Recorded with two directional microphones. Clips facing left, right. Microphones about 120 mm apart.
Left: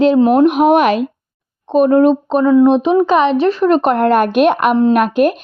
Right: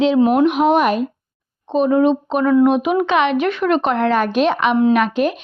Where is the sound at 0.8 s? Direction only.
90° left.